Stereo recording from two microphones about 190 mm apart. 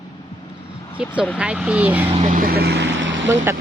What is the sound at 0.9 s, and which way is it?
Speech, 5° right (ahead or behind).